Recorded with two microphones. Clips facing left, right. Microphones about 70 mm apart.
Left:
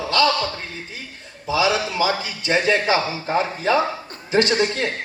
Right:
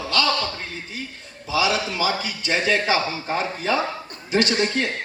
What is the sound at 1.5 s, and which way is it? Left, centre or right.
A man's voice, left.